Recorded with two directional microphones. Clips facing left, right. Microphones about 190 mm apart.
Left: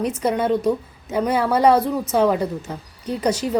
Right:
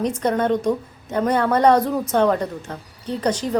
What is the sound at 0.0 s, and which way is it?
A woman's voice, 5° left (ahead or behind).